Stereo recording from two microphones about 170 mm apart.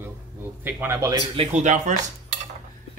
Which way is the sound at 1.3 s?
45° right (ahead or behind).